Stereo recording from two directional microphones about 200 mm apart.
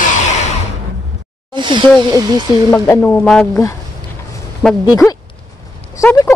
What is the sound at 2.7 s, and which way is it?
Speech, 10° left (ahead or behind).